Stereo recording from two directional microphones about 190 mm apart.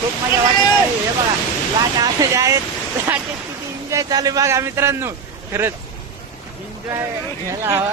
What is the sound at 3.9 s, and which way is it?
Speech, 20° right (ahead or behind).